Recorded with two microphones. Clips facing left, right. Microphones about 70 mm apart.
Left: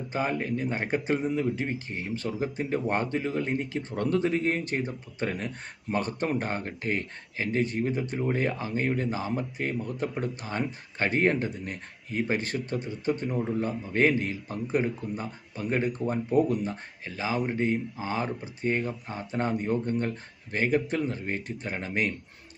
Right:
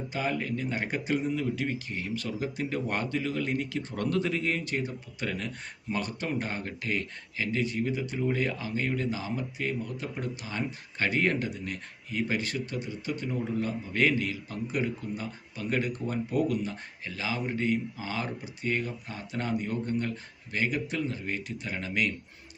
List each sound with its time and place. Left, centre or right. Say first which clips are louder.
0.1 s speech: left 3 dB; left